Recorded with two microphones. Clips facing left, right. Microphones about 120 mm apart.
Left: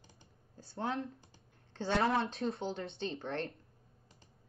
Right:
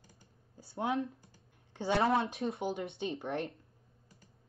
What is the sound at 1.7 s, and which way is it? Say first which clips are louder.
Speech: right 2 dB; 15° right (ahead or behind).